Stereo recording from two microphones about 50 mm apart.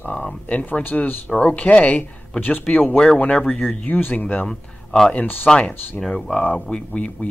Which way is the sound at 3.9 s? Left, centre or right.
Left.